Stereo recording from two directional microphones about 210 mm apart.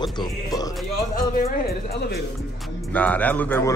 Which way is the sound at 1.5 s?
50° left (ahead or behind).